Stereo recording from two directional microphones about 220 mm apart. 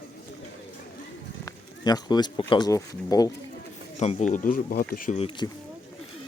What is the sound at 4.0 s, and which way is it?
Speech, 30° left (ahead or behind).